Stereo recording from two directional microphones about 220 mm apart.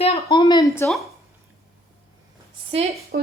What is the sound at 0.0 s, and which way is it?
Speech, 25° left (ahead or behind).